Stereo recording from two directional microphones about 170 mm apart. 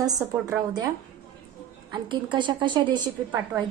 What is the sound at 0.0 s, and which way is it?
Speech, 20° right (ahead or behind).